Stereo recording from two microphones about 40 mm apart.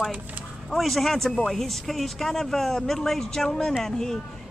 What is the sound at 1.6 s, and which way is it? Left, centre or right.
Speech, centre.